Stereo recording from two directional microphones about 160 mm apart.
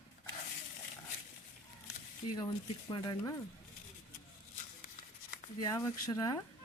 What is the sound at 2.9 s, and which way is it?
Speech, 25° left (ahead or behind).